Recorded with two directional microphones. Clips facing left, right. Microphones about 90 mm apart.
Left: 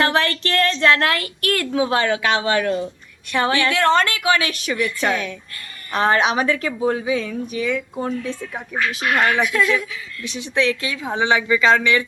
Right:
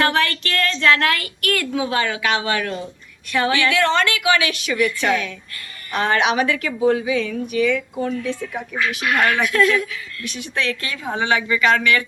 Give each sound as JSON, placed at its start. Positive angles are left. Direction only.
{"t": 0.0, "sound": "a woman's voice", "side_deg": 30}
{"t": 9.5, "sound": "speech", "side_deg": 5}
{"t": 10.2, "sound": "a woman's voice", "side_deg": 20}